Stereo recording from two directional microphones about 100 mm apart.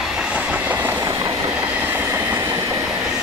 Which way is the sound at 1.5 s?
15° right (ahead or behind).